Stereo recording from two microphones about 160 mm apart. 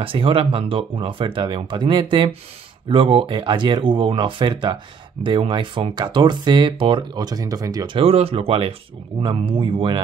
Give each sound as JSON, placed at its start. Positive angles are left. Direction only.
{"t": 0.0, "sound": "speech", "side_deg": -35}